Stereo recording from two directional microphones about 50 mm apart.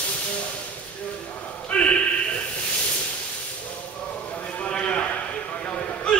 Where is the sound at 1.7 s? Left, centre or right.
Left.